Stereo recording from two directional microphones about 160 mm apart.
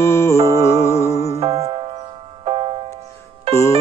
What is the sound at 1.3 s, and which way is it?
Music, 35° right (ahead or behind).